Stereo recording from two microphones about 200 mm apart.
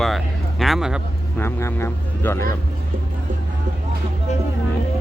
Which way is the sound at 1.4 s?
15° left (ahead or behind).